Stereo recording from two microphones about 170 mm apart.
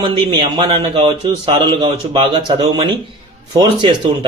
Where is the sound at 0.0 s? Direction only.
30° right (ahead or behind).